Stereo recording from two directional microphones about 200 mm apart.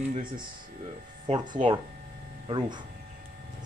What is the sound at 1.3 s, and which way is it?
Speech, 20° right (ahead or behind).